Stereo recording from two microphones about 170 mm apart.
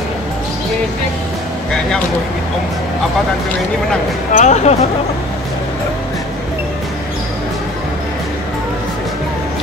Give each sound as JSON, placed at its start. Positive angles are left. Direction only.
{"t": 4.4, "sound": "speech", "side_deg": 40}